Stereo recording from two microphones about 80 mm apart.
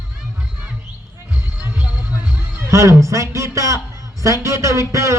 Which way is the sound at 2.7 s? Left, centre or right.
Right.